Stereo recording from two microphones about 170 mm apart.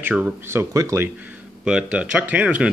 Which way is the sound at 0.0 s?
10° right (ahead or behind).